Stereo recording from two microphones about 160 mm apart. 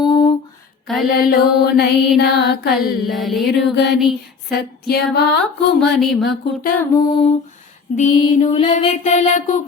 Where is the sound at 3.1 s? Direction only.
Centre (ahead or behind).